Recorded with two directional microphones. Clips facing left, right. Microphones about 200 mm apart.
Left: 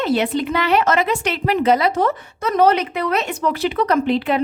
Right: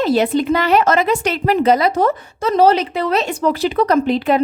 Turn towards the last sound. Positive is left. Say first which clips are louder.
# right 3 dB
turn(degrees=-40)  # may be behind; listen again after turning